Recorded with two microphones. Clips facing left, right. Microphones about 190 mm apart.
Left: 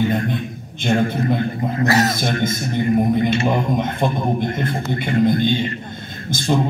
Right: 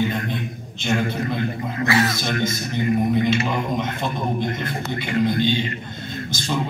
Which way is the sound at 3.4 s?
50° left (ahead or behind).